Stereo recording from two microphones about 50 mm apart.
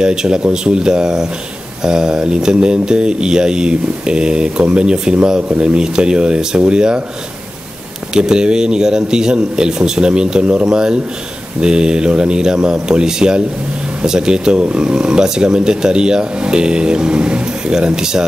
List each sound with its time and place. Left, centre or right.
0.0 s speech: centre
8.1 s speech: centre